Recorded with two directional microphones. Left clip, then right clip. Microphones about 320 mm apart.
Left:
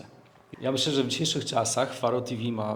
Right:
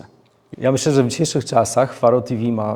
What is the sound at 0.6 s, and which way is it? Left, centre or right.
Speech, right.